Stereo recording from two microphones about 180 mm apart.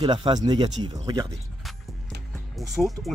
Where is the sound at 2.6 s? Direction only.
Centre (ahead or behind).